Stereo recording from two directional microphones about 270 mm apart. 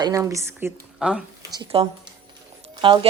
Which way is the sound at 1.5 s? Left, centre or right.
Right.